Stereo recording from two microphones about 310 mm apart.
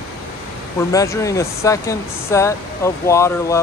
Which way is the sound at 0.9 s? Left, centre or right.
Centre.